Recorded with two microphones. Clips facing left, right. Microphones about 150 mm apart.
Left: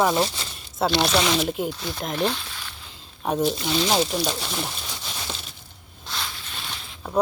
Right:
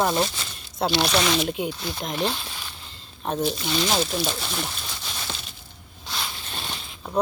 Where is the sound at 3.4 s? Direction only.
Centre (ahead or behind).